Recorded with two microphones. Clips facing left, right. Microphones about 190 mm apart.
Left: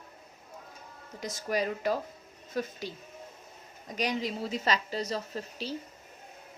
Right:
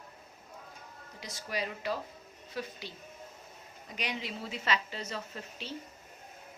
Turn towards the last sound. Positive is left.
turn(degrees=35)  # may be behind; listen again after turning